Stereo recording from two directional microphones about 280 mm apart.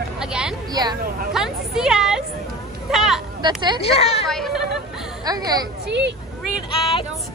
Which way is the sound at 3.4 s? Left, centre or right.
Centre.